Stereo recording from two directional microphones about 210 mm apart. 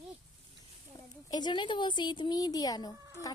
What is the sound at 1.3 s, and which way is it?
A woman's voice, 20° left (ahead or behind).